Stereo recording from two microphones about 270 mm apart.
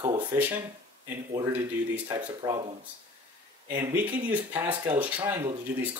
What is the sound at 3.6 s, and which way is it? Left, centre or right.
Speech, centre.